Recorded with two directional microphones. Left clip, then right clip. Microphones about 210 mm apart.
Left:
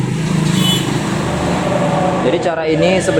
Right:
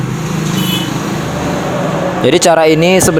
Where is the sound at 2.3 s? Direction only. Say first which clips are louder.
Right 7 dB; 50° right (ahead or behind).